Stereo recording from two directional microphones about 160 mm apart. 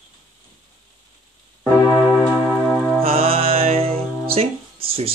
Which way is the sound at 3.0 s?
35° right (ahead or behind).